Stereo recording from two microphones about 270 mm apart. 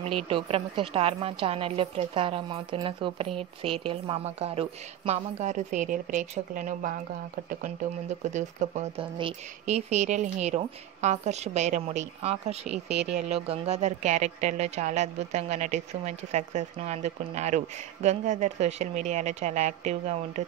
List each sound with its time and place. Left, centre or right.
0.3 s a woman's voice: centre
8.2 s a woman's voice: right
12.6 s speech: centre
13.3 s a woman's voice: right